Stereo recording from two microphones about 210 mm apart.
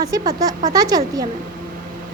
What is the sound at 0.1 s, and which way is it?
Speech, 15° right (ahead or behind).